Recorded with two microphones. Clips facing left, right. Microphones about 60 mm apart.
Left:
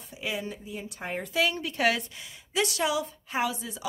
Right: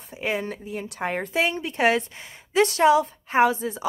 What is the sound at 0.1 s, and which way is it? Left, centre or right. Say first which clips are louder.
Speech: right 6 dB; right.